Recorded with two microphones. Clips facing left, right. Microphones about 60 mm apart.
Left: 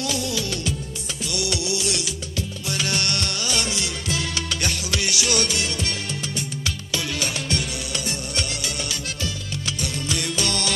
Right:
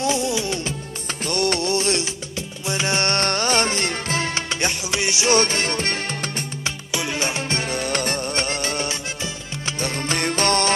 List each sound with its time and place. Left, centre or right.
0.0 s music: right
1.0 s music: right
2.3 s music: right
6.6 s music: right